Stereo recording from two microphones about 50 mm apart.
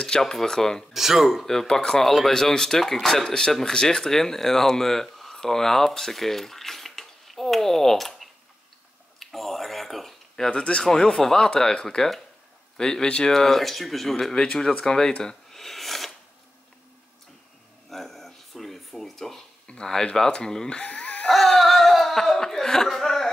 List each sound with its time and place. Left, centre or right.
0.0 s speech: centre
0.9 s speech: centre
1.4 s speech: centre
9.2 s a sound: centre
10.5 s speech: left; by 16.1 s centre
17.8 s a sound: centre
19.7 s speech: centre
20.8 s laughter: left
21.3 s laughter: centre